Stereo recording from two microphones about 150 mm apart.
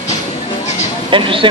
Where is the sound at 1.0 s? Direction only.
35° right (ahead or behind).